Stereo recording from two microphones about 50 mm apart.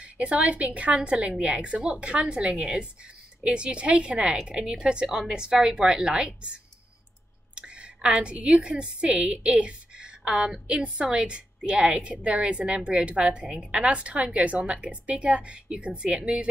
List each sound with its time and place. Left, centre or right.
0.0 s a woman's voice: right